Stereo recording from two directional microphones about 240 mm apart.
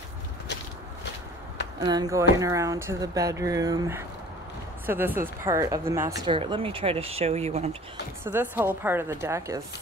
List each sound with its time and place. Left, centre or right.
1.9 s speech: centre
8.2 s speech: centre